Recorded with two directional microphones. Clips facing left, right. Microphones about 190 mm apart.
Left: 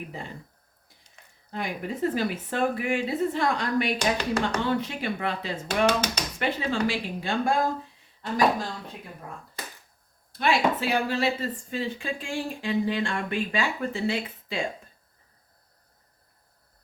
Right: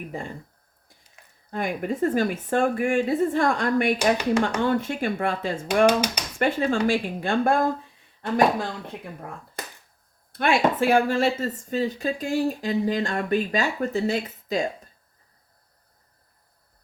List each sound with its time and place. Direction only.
1.5 s speech: 50° right (ahead or behind)
3.9 s speech: 10° right (ahead or behind)
4.6 s speech: 50° right (ahead or behind)
5.8 s speech: 10° right (ahead or behind)
6.4 s speech: 50° right (ahead or behind)
10.3 s speech: 55° right (ahead or behind)